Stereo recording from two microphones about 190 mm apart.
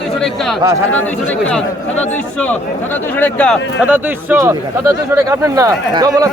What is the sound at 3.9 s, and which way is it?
Speech, 10° right (ahead or behind).